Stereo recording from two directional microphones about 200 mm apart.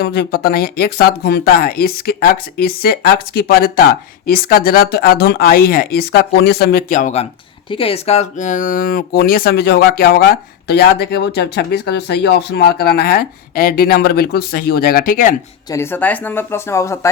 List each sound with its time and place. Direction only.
0.0 s speech: 50° left (ahead or behind)
15.7 s speech: 10° left (ahead or behind)